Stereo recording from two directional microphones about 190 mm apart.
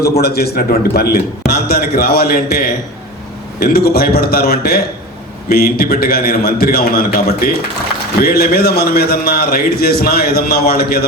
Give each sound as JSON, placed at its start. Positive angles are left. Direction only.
{"t": 0.2, "sound": "a man's voice", "side_deg": 55}